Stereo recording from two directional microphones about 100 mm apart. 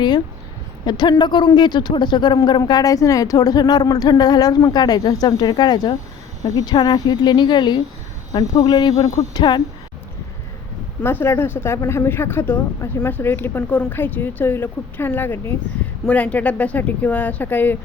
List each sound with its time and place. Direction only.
0.9 s speech: 50° left (ahead or behind)
11.0 s speech: 25° left (ahead or behind)